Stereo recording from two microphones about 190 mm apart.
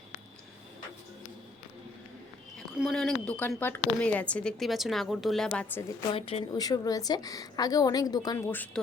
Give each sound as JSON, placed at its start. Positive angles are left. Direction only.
{"t": 2.6, "sound": "a woman's voice", "side_deg": 0}
{"t": 6.1, "sound": "a woman's voice", "side_deg": 30}